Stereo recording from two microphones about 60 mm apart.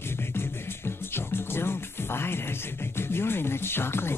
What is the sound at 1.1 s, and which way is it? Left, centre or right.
Music, left.